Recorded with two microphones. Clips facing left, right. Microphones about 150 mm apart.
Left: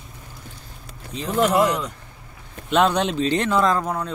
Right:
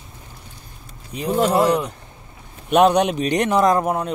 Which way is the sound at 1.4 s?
30° right (ahead or behind).